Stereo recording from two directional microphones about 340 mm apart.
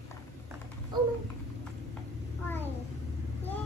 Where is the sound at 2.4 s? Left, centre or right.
Centre.